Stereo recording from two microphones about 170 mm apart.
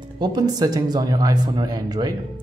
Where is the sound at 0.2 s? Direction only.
25° right (ahead or behind).